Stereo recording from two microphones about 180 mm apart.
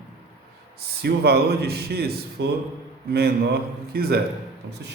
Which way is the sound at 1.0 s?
60° right (ahead or behind).